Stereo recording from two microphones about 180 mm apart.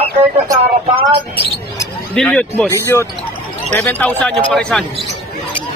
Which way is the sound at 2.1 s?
5° left (ahead or behind).